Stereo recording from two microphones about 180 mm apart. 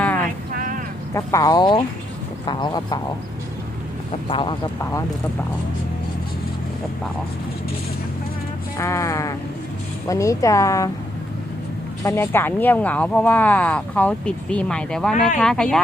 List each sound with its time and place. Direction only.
0.5 s a sound: 50° right (ahead or behind)
1.1 s speech: 20° left (ahead or behind)
4.3 s speech: 30° left (ahead or behind)
4.8 s speech: 15° left (ahead or behind)
8.8 s speech: 15° left (ahead or behind)
12.0 s speech: 15° left (ahead or behind)